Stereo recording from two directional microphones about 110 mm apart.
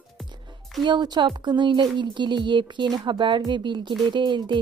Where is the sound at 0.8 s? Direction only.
45° right (ahead or behind).